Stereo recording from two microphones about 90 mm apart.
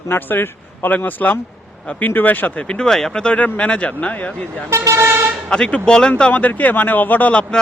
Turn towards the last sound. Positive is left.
turn(degrees=15)  # may be behind; listen again after turning